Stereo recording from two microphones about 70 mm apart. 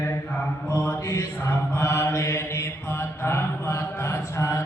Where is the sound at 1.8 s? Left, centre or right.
Left.